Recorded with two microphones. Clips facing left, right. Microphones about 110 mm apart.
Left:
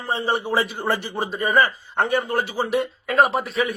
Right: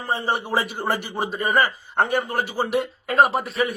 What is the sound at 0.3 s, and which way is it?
Speech, 10° right (ahead or behind).